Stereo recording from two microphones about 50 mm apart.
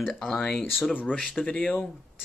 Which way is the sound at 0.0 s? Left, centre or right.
Centre.